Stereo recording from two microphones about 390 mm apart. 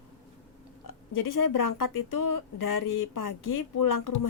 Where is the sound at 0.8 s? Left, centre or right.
Left.